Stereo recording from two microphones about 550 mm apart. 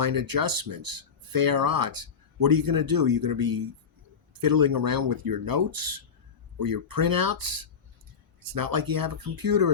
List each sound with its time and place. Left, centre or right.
0.0 s speech: right